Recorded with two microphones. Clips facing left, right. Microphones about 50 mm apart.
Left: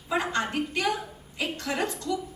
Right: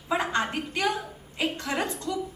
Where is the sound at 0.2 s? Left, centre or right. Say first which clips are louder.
Even; right.